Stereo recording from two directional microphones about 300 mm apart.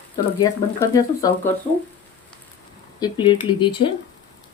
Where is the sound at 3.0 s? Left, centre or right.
Centre.